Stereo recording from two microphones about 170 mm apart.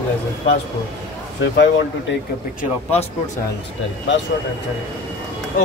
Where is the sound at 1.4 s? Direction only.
90° left.